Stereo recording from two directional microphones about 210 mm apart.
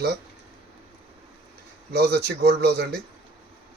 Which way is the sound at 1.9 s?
50° right (ahead or behind).